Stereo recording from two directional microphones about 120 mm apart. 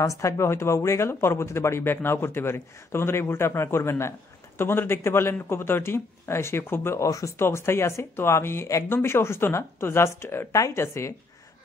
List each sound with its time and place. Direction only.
0.0 s speech: 25° left (ahead or behind)